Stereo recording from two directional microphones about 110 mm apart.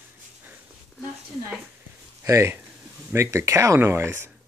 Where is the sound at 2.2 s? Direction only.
25° right (ahead or behind).